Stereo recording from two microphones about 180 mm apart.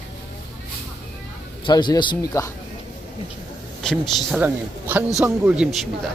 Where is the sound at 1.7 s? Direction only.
25° left (ahead or behind).